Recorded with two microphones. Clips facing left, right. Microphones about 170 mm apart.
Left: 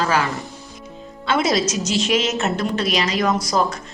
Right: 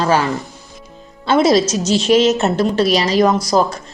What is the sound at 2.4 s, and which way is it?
A woman's voice, 35° right (ahead or behind).